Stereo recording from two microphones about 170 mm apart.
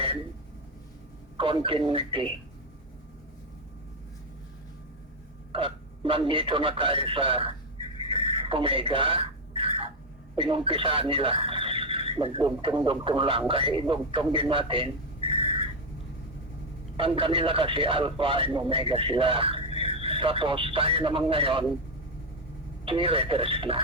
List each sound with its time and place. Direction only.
1.4 s speech: 30° right (ahead or behind)
5.5 s speech: 30° right (ahead or behind)
8.1 s a sound: 35° right (ahead or behind)
10.3 s speech: 30° right (ahead or behind)
15.3 s vehicle: 35° right (ahead or behind)
17.0 s speech: 30° right (ahead or behind)
19.7 s a sound: 35° left (ahead or behind)
20.0 s speech: 30° right (ahead or behind)
22.9 s speech: 30° right (ahead or behind)